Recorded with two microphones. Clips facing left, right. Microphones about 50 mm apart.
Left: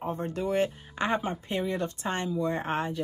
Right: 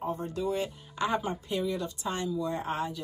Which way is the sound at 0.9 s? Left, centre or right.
Left.